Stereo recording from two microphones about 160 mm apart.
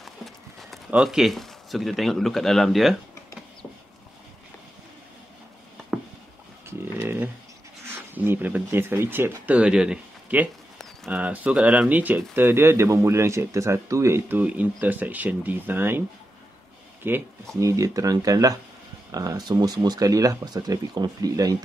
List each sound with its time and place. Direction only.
0.0 s speech: centre (ahead or behind)
5.9 s a sound: 5° right (ahead or behind)
7.9 s speech: 10° right (ahead or behind)
17.0 s speech: 15° right (ahead or behind)